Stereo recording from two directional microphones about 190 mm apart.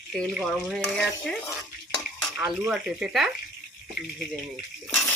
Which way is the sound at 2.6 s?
5° right (ahead or behind).